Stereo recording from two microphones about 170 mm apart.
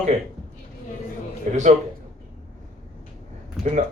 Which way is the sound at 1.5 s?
45° right (ahead or behind).